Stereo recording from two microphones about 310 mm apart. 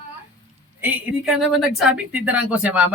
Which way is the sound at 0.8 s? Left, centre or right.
Centre.